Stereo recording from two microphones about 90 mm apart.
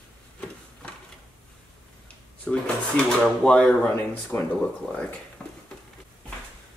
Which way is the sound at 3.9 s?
20° left (ahead or behind).